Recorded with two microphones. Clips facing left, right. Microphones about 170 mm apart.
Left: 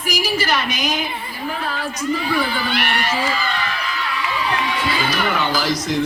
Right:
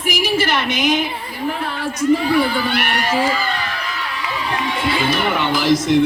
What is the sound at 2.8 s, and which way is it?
Speech, 40° right (ahead or behind).